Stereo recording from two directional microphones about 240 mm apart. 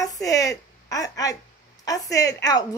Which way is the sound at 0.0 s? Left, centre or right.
Centre.